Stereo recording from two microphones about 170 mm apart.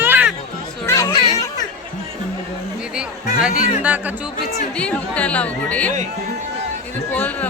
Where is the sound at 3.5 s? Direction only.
50° left (ahead or behind).